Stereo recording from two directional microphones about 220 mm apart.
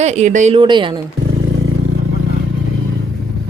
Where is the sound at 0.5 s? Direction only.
20° right (ahead or behind).